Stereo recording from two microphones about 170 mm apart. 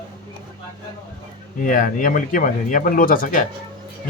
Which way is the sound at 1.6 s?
55° left (ahead or behind).